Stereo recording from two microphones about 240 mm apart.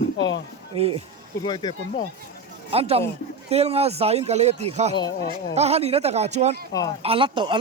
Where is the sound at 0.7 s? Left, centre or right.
Right.